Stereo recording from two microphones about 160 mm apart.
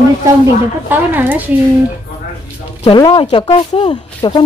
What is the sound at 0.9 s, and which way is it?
Speech, 10° right (ahead or behind).